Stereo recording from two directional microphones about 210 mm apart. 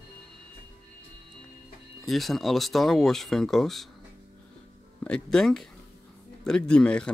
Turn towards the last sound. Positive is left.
turn(degrees=5)  # may be behind; listen again after turning